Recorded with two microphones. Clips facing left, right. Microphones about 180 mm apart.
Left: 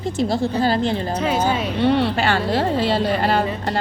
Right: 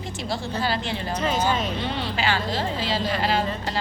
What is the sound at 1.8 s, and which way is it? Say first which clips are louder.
A woman's voice: left 10 dB; 65° left (ahead or behind).